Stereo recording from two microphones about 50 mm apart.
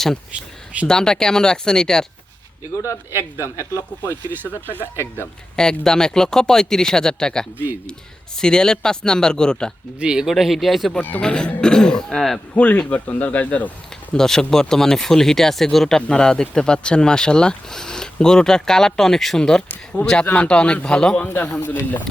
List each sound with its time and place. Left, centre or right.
0.9 s speech: centre
2.7 s speech: left
4.9 s speech: left
5.5 s speech: centre
10.0 s speech: centre
10.3 s speech: centre
11.2 s speech: centre
12.5 s a man's voice: left
14.1 s a man's voice: centre
21.2 s speech: left